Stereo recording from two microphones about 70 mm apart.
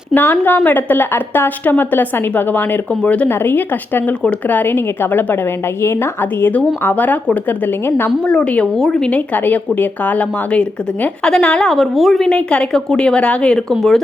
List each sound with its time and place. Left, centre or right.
0.1 s speech: left
3.2 s a woman's voice: left
6.8 s a woman's voice: left
8.3 s speech: centre
11.7 s a woman's voice: centre
12.3 s speech: centre